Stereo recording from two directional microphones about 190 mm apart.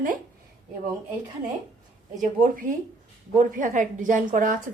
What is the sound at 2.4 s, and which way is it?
A woman's voice, 45° right (ahead or behind).